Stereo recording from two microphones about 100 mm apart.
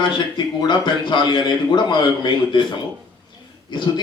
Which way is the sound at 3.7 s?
50° left (ahead or behind).